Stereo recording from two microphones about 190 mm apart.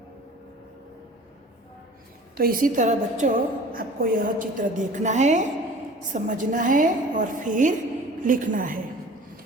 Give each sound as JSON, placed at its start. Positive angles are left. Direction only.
{"t": 2.3, "sound": "a woman's voice", "side_deg": -50}